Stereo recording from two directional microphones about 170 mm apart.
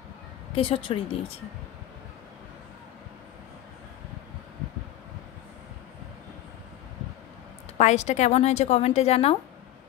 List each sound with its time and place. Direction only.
0.6 s a woman's voice: 35° left (ahead or behind)
7.7 s a woman's voice: 45° left (ahead or behind)